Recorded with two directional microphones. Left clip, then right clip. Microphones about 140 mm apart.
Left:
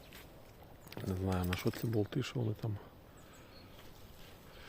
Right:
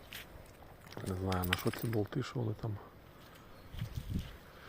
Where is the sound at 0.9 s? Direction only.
35° left (ahead or behind).